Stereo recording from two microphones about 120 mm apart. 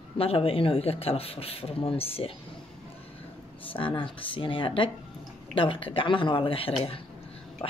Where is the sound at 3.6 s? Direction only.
45° left (ahead or behind).